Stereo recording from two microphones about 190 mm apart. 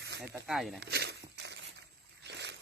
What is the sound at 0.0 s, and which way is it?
Snake, 65° right (ahead or behind).